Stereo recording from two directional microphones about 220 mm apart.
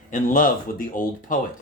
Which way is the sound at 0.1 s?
40° left (ahead or behind).